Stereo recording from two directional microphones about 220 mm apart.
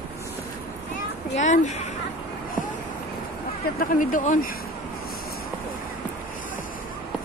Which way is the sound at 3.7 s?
35° left (ahead or behind).